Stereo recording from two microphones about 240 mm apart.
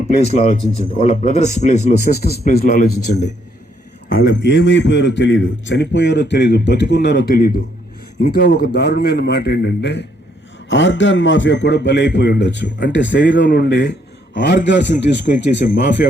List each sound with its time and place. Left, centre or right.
0.3 s a man's voice: left
2.4 s speech: left
4.1 s a man's voice: left